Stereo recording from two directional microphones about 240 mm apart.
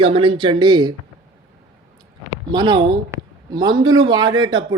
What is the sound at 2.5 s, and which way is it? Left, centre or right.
Speech, centre.